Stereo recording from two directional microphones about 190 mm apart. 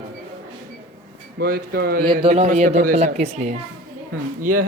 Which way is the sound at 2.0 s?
25° right (ahead or behind).